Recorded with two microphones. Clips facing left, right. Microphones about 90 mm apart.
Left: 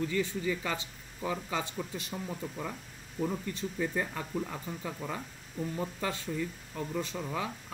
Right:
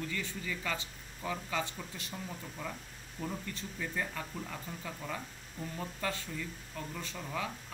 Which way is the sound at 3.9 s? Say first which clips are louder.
Left 4 dB; 25° left (ahead or behind).